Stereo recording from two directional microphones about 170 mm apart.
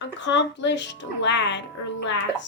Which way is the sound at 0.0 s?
90° left.